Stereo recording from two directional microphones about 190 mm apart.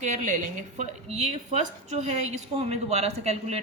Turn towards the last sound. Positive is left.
turn(degrees=-35)  # may be behind; listen again after turning